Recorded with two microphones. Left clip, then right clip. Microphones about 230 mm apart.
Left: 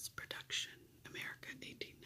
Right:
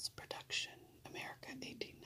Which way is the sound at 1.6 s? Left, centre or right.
Left.